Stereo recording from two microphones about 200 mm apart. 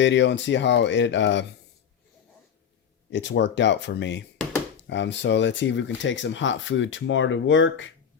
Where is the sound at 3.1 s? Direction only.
65° left (ahead or behind).